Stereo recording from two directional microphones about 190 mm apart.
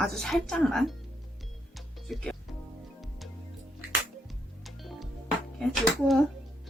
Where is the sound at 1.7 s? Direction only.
Centre (ahead or behind).